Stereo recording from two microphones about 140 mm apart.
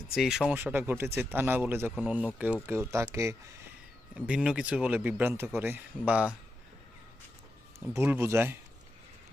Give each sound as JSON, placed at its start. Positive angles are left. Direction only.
{"t": 0.1, "sound": "speech", "side_deg": -5}
{"t": 4.1, "sound": "speech", "side_deg": -5}
{"t": 7.9, "sound": "speech", "side_deg": -15}